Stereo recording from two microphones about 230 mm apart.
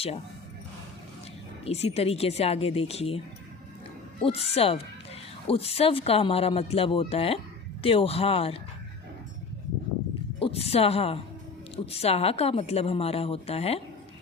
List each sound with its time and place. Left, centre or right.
1.6 s a woman's voice: left
4.2 s a woman's voice: left
10.4 s a woman's voice: left